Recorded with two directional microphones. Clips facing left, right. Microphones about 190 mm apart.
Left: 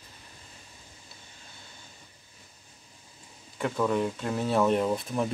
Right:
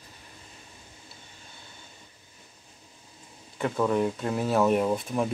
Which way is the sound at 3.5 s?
5° right (ahead or behind).